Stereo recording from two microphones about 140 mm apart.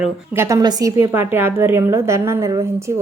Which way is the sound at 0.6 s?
30° right (ahead or behind).